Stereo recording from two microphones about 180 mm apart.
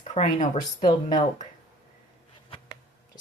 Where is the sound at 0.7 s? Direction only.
25° left (ahead or behind).